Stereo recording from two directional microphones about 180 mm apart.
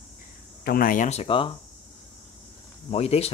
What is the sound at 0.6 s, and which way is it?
Speech, 55° left (ahead or behind).